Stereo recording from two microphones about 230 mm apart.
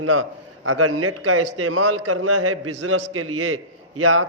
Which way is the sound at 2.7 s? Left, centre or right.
Right.